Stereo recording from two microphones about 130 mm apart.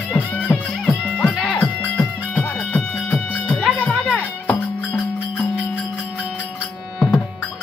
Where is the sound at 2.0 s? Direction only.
10° left (ahead or behind).